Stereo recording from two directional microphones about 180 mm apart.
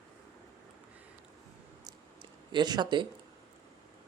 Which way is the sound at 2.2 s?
25° right (ahead or behind).